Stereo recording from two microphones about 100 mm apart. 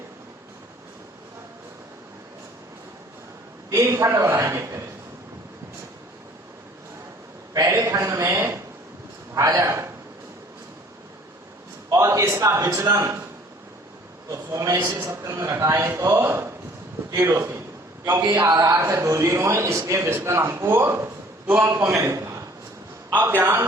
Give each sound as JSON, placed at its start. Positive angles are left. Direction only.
{"t": 3.7, "sound": "a man's voice", "side_deg": -30}
{"t": 7.7, "sound": "a man's voice", "side_deg": -30}
{"t": 9.6, "sound": "a sound", "side_deg": -30}
{"t": 11.9, "sound": "a man's voice", "side_deg": -30}
{"t": 14.3, "sound": "a man's voice", "side_deg": -30}
{"t": 18.4, "sound": "a man's voice", "side_deg": -35}
{"t": 21.8, "sound": "a man's voice", "side_deg": -30}